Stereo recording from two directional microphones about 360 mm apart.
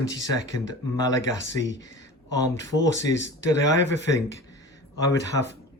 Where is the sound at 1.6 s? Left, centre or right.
Left.